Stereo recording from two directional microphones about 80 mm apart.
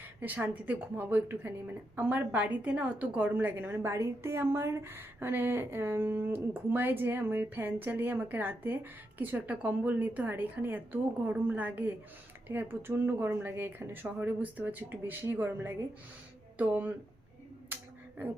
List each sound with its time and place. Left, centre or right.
0.2 s a woman's voice: right
17.7 s finger snapping: right